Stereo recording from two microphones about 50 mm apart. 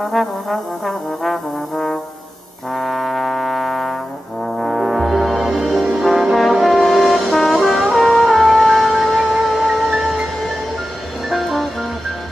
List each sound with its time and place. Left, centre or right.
0.0 s trombone: centre
4.6 s music: centre